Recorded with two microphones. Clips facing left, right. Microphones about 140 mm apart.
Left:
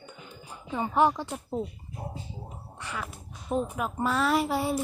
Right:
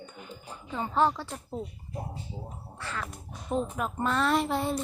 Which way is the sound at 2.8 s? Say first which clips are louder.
Even; 15° left (ahead or behind).